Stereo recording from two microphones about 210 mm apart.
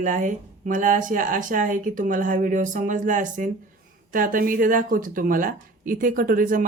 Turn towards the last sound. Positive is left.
turn(degrees=-40)  # may be behind; listen again after turning